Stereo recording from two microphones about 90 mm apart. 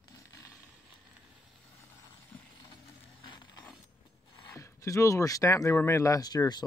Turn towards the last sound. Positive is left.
turn(degrees=50)  # may be behind; listen again after turning